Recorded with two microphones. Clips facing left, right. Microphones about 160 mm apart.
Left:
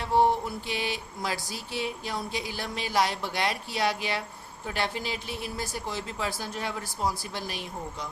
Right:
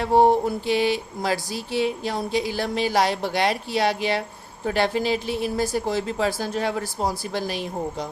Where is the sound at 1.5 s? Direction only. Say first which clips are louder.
Right 9 dB; 90° right.